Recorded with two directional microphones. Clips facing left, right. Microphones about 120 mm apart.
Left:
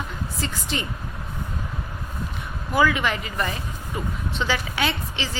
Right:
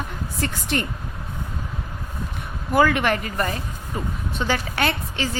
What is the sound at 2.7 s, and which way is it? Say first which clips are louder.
A woman's voice: right 3 dB; 50° right (ahead or behind).